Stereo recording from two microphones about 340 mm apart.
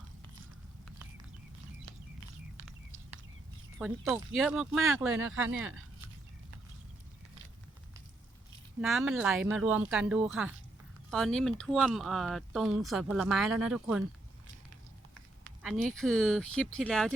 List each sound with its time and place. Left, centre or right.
3.8 s speech: centre
8.8 s speech: centre
15.6 s speech: centre